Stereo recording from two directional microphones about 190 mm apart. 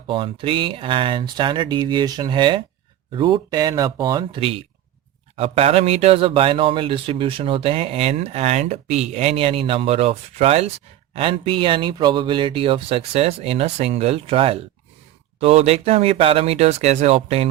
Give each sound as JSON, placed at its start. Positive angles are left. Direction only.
{"t": 0.1, "sound": "speech", "side_deg": -25}